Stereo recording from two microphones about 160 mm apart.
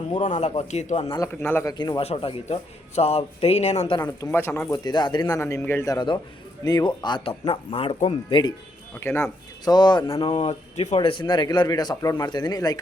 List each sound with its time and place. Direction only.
0.2 s speech: 45° left (ahead or behind)
1.3 s speech: 10° left (ahead or behind)
1.7 s speech: 30° left (ahead or behind)
4.2 s a man's voice: 15° left (ahead or behind)
9.0 s a man's voice: 15° left (ahead or behind)
10.3 s speech: 45° left (ahead or behind)
10.9 s a man's voice: 35° left (ahead or behind)